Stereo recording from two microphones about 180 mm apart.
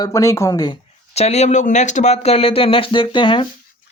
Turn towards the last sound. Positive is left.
turn(degrees=30)  # may be behind; listen again after turning